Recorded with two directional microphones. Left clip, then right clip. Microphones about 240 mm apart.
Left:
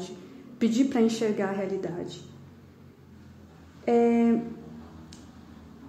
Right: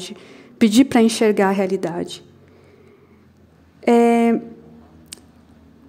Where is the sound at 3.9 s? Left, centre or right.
Right.